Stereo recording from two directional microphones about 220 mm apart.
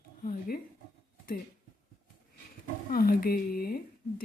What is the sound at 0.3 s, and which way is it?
Speech, 40° left (ahead or behind).